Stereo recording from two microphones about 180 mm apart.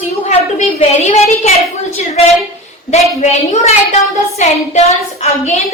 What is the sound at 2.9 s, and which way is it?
A woman's voice, 40° left (ahead or behind).